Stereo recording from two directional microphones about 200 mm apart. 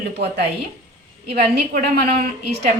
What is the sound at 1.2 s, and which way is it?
Speech, 55° right (ahead or behind).